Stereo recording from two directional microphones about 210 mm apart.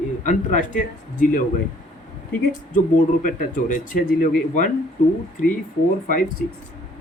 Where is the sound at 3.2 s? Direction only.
40° left (ahead or behind).